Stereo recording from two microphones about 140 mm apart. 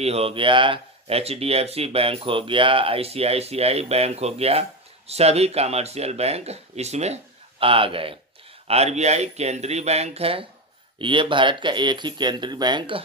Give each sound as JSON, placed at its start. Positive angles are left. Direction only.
{"t": 0.0, "sound": "speech", "side_deg": -45}